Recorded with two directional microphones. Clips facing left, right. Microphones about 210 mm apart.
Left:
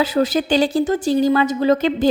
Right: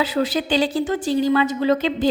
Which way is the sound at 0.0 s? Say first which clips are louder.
Left 3 dB; 45° left (ahead or behind).